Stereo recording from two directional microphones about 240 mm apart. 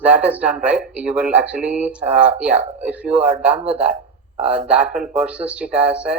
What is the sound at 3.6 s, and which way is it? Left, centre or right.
Speech, right.